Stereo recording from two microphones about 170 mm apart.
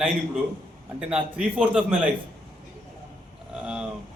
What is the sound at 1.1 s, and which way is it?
Speech, 5° right (ahead or behind).